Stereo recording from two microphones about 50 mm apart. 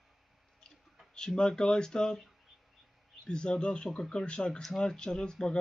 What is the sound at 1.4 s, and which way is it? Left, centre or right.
Speech, centre.